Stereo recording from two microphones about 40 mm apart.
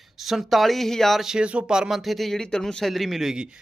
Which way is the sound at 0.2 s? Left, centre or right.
Centre.